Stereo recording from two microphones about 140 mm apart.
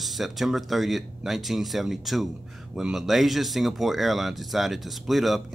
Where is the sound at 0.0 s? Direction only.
Centre (ahead or behind).